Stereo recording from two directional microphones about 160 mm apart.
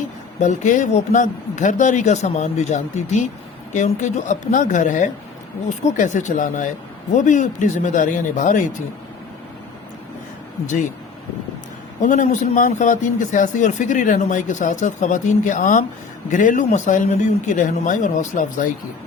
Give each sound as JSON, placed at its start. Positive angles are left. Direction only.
{"t": 0.3, "sound": "speech", "side_deg": 50}
{"t": 10.7, "sound": "speech", "side_deg": 50}
{"t": 12.0, "sound": "speech", "side_deg": 50}